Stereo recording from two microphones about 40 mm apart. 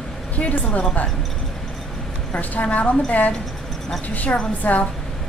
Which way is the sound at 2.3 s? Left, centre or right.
Left.